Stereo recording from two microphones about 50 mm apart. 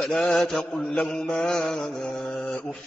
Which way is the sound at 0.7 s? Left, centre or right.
Left.